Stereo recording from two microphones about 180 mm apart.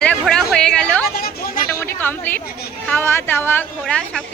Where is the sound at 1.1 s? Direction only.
55° left (ahead or behind).